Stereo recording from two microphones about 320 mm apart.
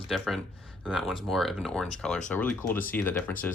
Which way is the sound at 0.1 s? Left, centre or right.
Centre.